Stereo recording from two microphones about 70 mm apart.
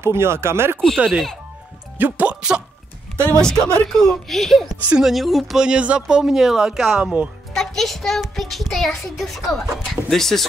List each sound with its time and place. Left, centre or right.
0.0 s speech: right
0.9 s speech: centre
2.0 s speech: right
3.3 s a child's voice: centre
5.6 s speech: centre
7.5 s a child's voice: centre